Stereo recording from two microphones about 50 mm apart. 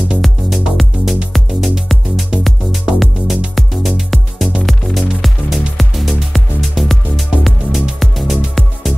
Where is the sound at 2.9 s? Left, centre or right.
Centre.